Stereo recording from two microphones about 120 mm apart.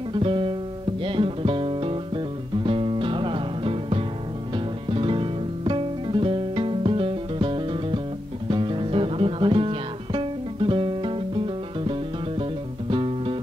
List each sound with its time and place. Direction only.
0.1 s music: 45° right (ahead or behind)